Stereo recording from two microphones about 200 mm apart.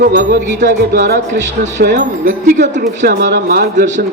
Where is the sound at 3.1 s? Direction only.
55° right (ahead or behind).